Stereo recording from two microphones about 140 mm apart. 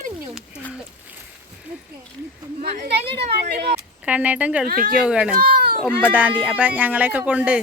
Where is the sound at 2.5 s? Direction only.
60° right (ahead or behind).